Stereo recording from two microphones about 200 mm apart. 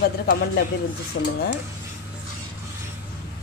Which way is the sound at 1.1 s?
65° left (ahead or behind).